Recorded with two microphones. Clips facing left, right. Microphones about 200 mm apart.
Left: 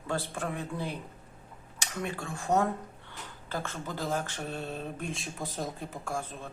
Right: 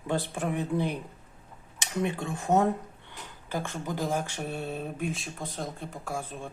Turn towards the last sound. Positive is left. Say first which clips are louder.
# right 1 dB
turn(degrees=-10)  # may be behind; listen again after turning